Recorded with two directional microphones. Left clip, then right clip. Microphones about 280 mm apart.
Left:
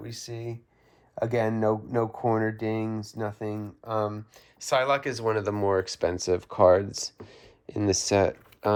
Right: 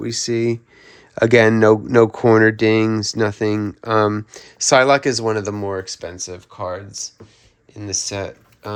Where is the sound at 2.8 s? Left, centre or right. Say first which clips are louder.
Right 14 dB; right.